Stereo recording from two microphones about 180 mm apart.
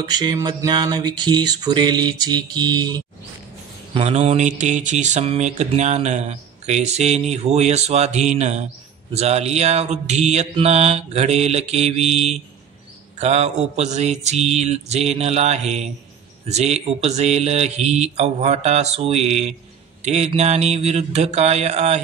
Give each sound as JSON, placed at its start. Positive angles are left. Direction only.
{"t": 0.1, "sound": "mantra", "side_deg": -25}
{"t": 3.9, "sound": "speech", "side_deg": -35}